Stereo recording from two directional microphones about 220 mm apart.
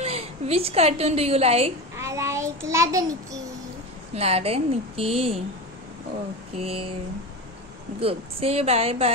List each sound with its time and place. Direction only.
0.0 s a woman's voice: 25° right (ahead or behind)
2.0 s a child's voice: 15° right (ahead or behind)
4.1 s a woman's voice: 30° right (ahead or behind)
6.5 s a woman's voice: 25° right (ahead or behind)
8.0 s a woman's voice: 25° right (ahead or behind)